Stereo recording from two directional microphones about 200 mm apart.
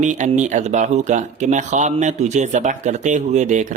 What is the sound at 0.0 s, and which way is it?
Speech, 35° right (ahead or behind).